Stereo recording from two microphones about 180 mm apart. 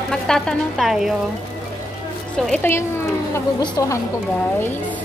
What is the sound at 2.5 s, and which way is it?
A woman's voice, 15° left (ahead or behind).